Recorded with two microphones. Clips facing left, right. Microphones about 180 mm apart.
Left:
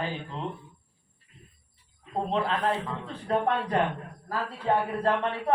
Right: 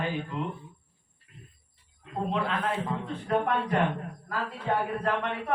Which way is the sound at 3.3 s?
30° left (ahead or behind).